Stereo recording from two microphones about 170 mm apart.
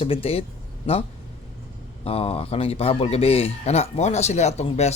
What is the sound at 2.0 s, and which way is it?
Speech, 35° left (ahead or behind).